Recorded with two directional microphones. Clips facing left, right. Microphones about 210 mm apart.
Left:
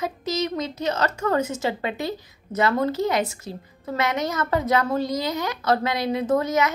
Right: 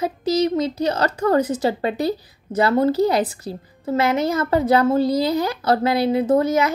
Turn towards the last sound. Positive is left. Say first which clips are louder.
# right 4 dB
turn(degrees=-30)  # may be behind; listen again after turning